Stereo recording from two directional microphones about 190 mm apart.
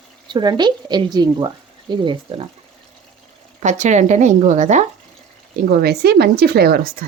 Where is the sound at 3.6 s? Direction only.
40° right (ahead or behind).